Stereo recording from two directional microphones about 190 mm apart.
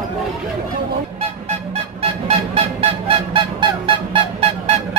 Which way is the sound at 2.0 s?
30° right (ahead or behind).